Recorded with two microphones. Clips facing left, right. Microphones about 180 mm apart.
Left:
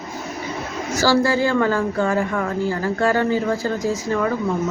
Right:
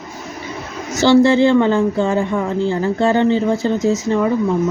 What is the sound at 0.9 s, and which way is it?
A woman's voice, 25° right (ahead or behind).